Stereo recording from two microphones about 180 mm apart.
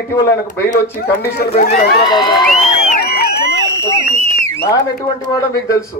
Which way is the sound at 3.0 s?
55° left (ahead or behind).